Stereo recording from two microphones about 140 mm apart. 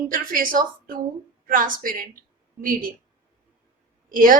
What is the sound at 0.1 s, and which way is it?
A woman's voice, 80° right.